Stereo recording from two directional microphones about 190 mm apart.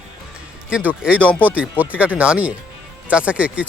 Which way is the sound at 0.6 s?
5° right (ahead or behind).